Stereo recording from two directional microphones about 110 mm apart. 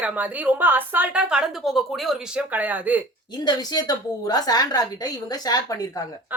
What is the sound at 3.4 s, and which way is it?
A woman's voice, 40° left (ahead or behind).